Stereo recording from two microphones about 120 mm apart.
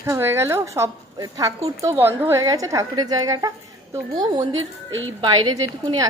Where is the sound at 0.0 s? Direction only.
20° right (ahead or behind).